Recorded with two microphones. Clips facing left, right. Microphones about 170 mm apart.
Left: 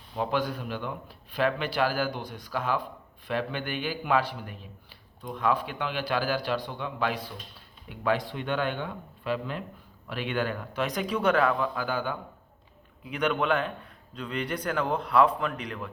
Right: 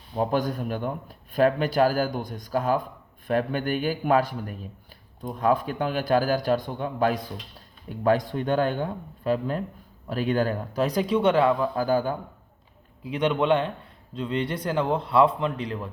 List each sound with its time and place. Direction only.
0.2 s a man's voice: 45° right (ahead or behind)
13.1 s a man's voice: 25° right (ahead or behind)